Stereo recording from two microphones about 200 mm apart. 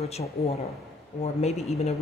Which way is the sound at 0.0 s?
30° left (ahead or behind).